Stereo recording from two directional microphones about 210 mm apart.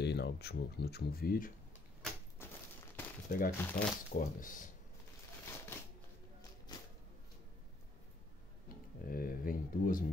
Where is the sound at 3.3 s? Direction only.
45° left (ahead or behind).